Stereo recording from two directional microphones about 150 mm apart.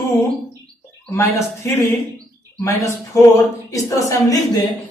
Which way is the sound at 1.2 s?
20° left (ahead or behind).